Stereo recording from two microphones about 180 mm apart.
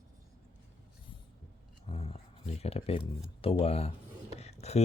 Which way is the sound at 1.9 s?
35° left (ahead or behind).